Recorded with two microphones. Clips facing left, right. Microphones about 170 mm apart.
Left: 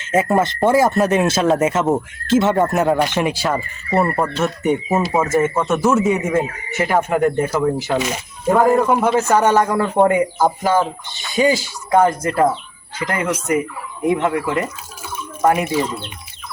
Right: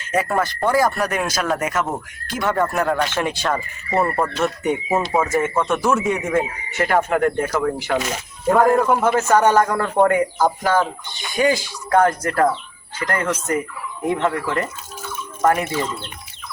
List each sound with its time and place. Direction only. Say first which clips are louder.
0.0 s speech: left 4 dB; 25° left (ahead or behind)
8.4 s speech: left 1 dB; centre (ahead or behind)
9.0 s speech: left 1 dB; 15° left (ahead or behind)
10.0 s speech: left 1 dB; 20° left (ahead or behind)